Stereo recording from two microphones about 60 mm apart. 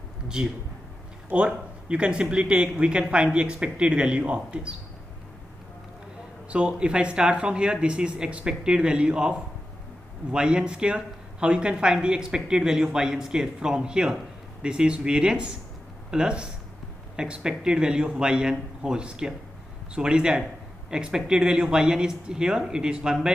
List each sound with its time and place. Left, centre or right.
0.3 s speech: centre
6.5 s speech: centre